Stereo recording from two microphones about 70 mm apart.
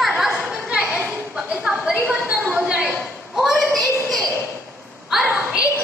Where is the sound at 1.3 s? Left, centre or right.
Right.